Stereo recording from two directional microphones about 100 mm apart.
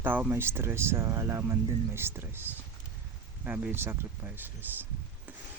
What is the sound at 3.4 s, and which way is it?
Speech, 15° right (ahead or behind).